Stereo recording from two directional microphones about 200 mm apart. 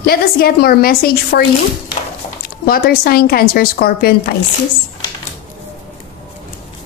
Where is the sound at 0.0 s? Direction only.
50° left (ahead or behind).